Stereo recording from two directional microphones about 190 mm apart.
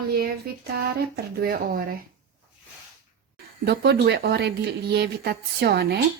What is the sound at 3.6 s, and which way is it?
Speech, 60° right (ahead or behind).